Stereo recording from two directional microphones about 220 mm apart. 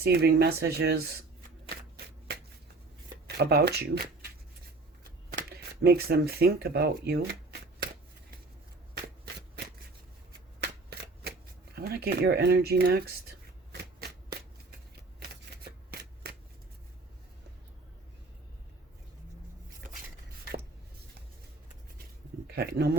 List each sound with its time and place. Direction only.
0.0 s speech: 45° right (ahead or behind)
2.3 s shuffling cards: 45° right (ahead or behind)
3.2 s speech: 45° right (ahead or behind)
5.5 s speech: 45° right (ahead or behind)
10.6 s shuffling cards: 45° right (ahead or behind)
15.6 s shuffling cards: 45° right (ahead or behind)
22.4 s a sound: 45° right (ahead or behind)